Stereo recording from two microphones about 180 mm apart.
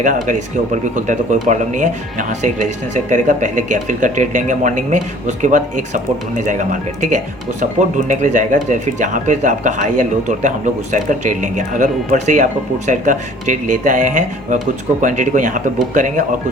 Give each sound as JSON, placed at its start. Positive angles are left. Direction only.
{"t": 0.0, "sound": "speech", "side_deg": -45}